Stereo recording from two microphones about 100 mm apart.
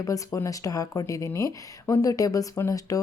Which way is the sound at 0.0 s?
30° left (ahead or behind).